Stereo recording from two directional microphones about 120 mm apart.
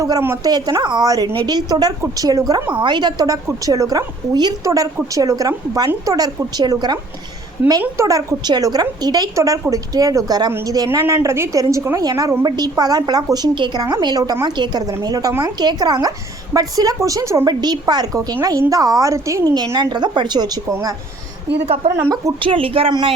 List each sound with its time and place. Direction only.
0.0 s a woman's voice: 25° right (ahead or behind)
15.5 s a woman's voice: 35° right (ahead or behind)
19.7 s a woman's voice: 35° right (ahead or behind)
22.4 s speech: 45° right (ahead or behind)